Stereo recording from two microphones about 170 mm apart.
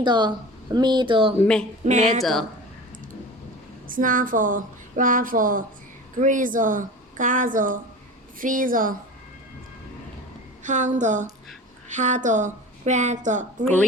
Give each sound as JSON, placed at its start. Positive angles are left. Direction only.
{"t": 0.0, "sound": "speech", "side_deg": -25}
{"t": 1.4, "sound": "speech", "side_deg": 5}
{"t": 1.8, "sound": "speech", "side_deg": -45}
{"t": 3.8, "sound": "speech", "side_deg": -55}
{"t": 10.6, "sound": "a woman's voice", "side_deg": -45}